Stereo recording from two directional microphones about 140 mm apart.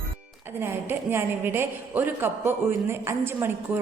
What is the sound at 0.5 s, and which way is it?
A woman's voice, 15° right (ahead or behind).